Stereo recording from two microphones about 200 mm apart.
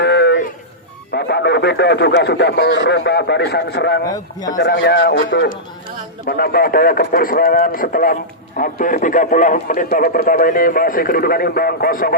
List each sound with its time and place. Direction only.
0.0 s a sound: 55° left (ahead or behind)
1.1 s speech: 55° left (ahead or behind)
4.1 s a man's voice: 20° left (ahead or behind)
4.6 s speech: 55° left (ahead or behind)